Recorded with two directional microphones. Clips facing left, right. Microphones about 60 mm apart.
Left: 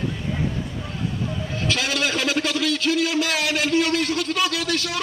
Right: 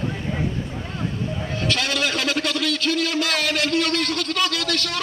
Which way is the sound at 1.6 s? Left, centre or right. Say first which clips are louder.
Even; centre.